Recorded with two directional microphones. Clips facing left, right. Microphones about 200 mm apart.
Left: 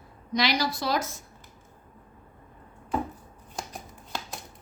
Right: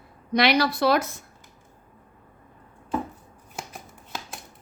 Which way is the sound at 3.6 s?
Centre (ahead or behind).